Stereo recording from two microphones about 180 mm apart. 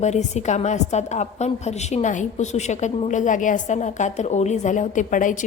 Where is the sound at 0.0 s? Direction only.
40° left (ahead or behind).